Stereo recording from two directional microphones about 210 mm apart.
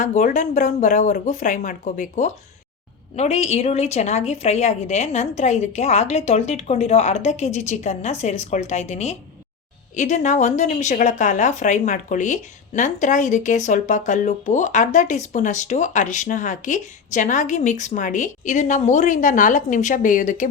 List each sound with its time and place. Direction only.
0.0 s speech: 35° left (ahead or behind)